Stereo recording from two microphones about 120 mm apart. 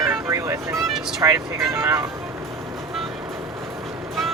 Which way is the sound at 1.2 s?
25° right (ahead or behind).